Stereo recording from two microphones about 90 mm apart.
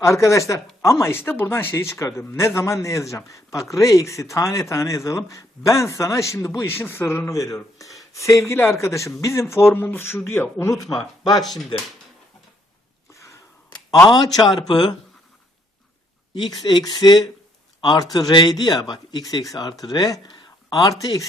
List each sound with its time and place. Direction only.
0.0 s speech: 35° left (ahead or behind)
10.8 s speech: 40° left (ahead or behind)
11.4 s speech: centre (ahead or behind)
13.9 s speech: 45° left (ahead or behind)
14.7 s speech: 60° left (ahead or behind)
16.4 s speech: 55° left (ahead or behind)
17.7 s a sound: 60° left (ahead or behind)
18.1 s speech: 50° left (ahead or behind)